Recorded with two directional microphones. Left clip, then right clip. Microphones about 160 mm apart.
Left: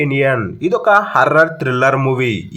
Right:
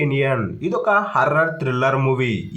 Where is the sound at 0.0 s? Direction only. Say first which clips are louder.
Left 5 dB; 30° left (ahead or behind).